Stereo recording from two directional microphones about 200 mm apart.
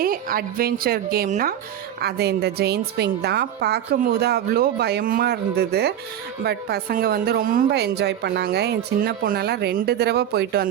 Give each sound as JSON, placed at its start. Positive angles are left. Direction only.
{"t": 0.0, "sound": "speech", "side_deg": -45}